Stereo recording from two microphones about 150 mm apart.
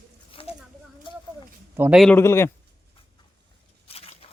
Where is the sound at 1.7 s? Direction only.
15° right (ahead or behind).